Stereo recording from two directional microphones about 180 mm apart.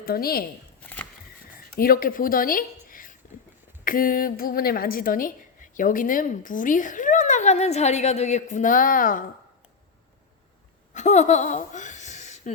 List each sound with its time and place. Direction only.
0.0 s speech: 55° left (ahead or behind)
1.7 s a woman's voice: 55° left (ahead or behind)
10.9 s speech: 40° left (ahead or behind)